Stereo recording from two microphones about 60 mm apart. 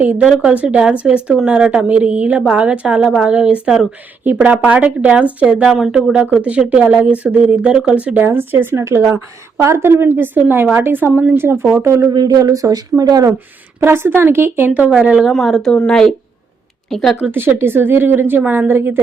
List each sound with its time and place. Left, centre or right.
0.2 s speech: centre
3.0 s speech: centre
3.2 s speech: right
4.6 s speech: right
5.5 s speech: centre
8.2 s speech: right
10.1 s speech: right
11.3 s speech: right
11.8 s speech: right
13.7 s speech: right
15.1 s speech: centre
15.7 s speech: centre
17.3 s speech: right